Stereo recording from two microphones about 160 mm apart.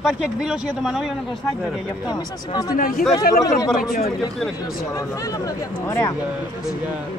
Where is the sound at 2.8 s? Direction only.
60° left (ahead or behind).